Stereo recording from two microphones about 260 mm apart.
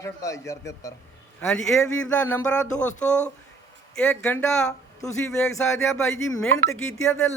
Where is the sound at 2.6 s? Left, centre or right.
Left.